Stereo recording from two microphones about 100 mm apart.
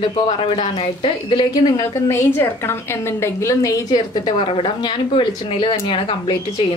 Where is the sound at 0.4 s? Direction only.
60° left (ahead or behind).